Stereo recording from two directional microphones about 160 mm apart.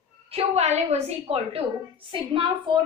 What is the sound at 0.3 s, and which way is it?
A woman's voice, 40° right (ahead or behind).